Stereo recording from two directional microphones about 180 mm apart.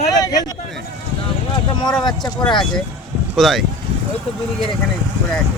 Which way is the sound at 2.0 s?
25° left (ahead or behind).